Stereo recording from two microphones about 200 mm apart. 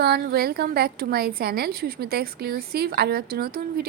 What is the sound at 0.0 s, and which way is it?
A woman's voice, 50° right (ahead or behind).